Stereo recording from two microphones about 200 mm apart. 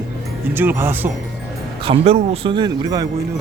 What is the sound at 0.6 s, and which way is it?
Speech, 10° right (ahead or behind).